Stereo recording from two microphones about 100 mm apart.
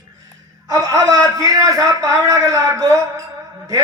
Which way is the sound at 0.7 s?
35° right (ahead or behind).